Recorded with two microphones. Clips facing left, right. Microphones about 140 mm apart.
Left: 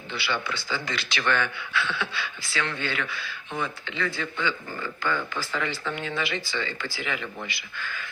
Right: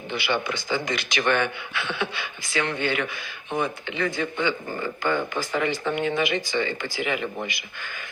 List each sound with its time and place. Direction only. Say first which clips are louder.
0.1 s speech: right 4 dB; 15° right (ahead or behind)